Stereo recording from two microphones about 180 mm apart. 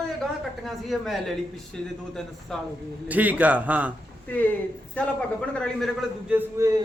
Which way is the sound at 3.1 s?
10° right (ahead or behind).